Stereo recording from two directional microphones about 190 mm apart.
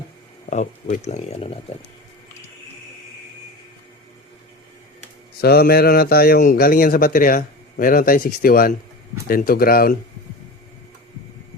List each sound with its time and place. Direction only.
0.5 s speech: 40° left (ahead or behind)
5.4 s a man's voice: 55° left (ahead or behind)